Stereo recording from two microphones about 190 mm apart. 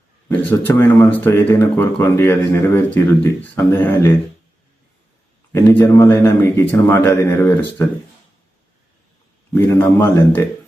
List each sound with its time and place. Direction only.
0.7 s speech: 10° left (ahead or behind)
5.5 s speech: 10° left (ahead or behind)
9.6 s speech: 10° left (ahead or behind)